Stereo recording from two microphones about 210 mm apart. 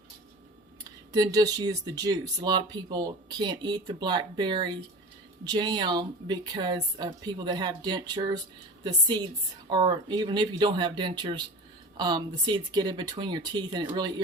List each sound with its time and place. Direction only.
1.1 s speech: 20° right (ahead or behind)